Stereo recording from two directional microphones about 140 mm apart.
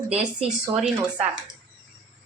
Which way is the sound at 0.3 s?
5° right (ahead or behind).